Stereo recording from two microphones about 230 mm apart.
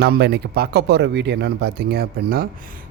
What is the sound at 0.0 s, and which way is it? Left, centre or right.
A man's voice, right.